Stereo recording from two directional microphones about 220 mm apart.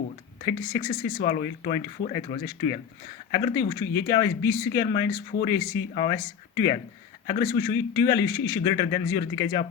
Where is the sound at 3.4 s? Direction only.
15° left (ahead or behind).